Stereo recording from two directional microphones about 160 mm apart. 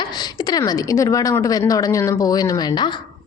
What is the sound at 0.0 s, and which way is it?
A woman's voice, 25° left (ahead or behind).